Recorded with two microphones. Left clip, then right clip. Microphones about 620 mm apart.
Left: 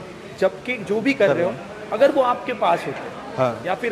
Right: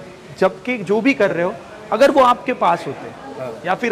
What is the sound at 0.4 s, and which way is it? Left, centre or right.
A man's voice, right.